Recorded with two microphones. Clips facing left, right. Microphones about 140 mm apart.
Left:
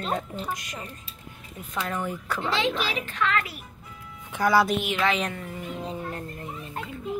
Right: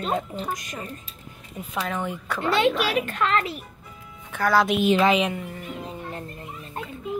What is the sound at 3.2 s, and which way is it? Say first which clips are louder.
Speech: even; 35° right (ahead or behind).